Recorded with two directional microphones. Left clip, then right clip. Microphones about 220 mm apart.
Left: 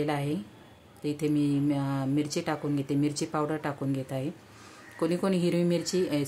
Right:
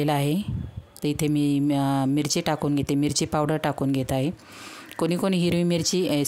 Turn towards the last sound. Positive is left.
turn(degrees=-45)  # may be behind; listen again after turning